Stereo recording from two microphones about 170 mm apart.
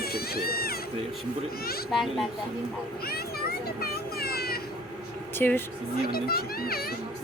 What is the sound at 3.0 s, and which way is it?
Vehicle, 65° left (ahead or behind).